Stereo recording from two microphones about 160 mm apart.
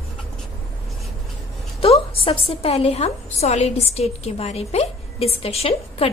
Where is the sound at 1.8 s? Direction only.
35° left (ahead or behind).